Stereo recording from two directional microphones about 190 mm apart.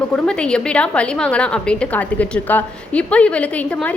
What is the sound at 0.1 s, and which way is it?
A woman's voice, 5° left (ahead or behind).